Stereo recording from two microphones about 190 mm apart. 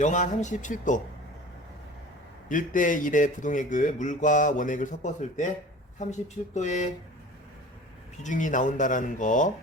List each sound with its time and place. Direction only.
0.0 s speech: 40° left (ahead or behind)
2.5 s speech: 45° left (ahead or behind)
8.2 s speech: 40° left (ahead or behind)